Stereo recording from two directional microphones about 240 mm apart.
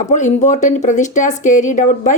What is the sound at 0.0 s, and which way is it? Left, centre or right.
Speech, left.